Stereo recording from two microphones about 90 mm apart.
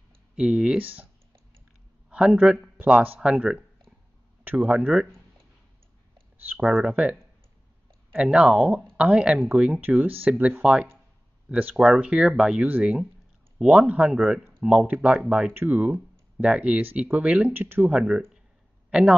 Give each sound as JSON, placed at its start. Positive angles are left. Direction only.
{"t": 0.4, "sound": "speech", "side_deg": -10}
{"t": 2.0, "sound": "speech", "side_deg": -10}
{"t": 6.3, "sound": "a sound", "side_deg": -20}
{"t": 6.6, "sound": "speech", "side_deg": -10}
{"t": 8.2, "sound": "speech", "side_deg": -10}
{"t": 12.6, "sound": "speech", "side_deg": -20}
{"t": 17.5, "sound": "speech", "side_deg": -25}
{"t": 17.9, "sound": "speech", "side_deg": -10}